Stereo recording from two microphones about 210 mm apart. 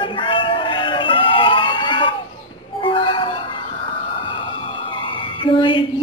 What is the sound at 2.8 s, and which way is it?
Music, 25° left (ahead or behind).